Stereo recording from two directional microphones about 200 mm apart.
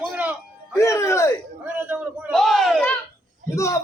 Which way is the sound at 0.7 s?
15° left (ahead or behind).